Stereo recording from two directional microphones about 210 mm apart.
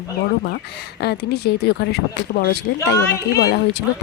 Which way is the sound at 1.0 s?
50° left (ahead or behind).